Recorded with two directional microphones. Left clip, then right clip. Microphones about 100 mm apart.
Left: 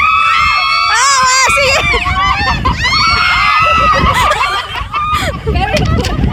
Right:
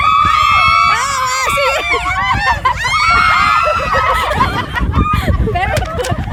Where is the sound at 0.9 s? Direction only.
60° right (ahead or behind).